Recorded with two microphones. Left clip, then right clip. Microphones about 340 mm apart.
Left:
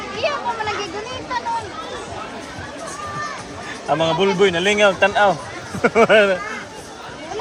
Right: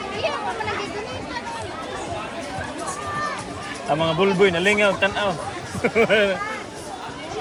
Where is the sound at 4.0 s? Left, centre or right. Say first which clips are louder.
Left 2 dB; centre.